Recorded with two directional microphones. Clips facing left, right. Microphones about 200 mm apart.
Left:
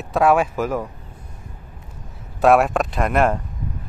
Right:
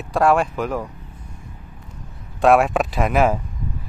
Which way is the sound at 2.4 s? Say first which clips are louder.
Even; centre (ahead or behind).